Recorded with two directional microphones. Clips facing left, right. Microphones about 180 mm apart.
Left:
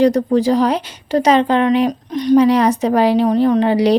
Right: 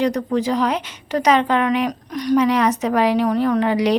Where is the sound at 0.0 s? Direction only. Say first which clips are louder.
Left 6 dB; 35° left (ahead or behind).